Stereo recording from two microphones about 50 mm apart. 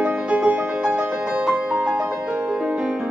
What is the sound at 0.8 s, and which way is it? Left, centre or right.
Music, right.